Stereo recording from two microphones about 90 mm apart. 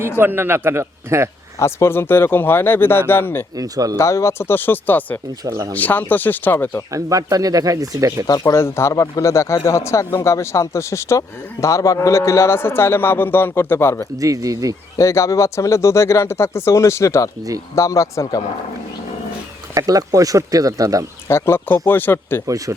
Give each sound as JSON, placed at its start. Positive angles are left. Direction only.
{"t": 0.2, "sound": "a man's voice", "side_deg": -25}
{"t": 1.5, "sound": "a man's voice", "side_deg": 30}
{"t": 3.6, "sound": "speech", "side_deg": -40}
{"t": 3.9, "sound": "a man's voice", "side_deg": 35}
{"t": 5.5, "sound": "speech", "side_deg": -40}
{"t": 5.7, "sound": "a man's voice", "side_deg": 20}
{"t": 6.9, "sound": "speech", "side_deg": -40}
{"t": 8.5, "sound": "a man's voice", "side_deg": 30}
{"t": 14.2, "sound": "speech", "side_deg": -40}
{"t": 14.9, "sound": "speech", "side_deg": 35}
{"t": 19.7, "sound": "speech", "side_deg": -45}
{"t": 21.2, "sound": "a man's voice", "side_deg": 30}
{"t": 22.4, "sound": "speech", "side_deg": -40}